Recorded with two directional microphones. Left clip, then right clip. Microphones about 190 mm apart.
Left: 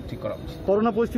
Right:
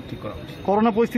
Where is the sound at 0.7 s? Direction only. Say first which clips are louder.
Right 2 dB; 35° right (ahead or behind).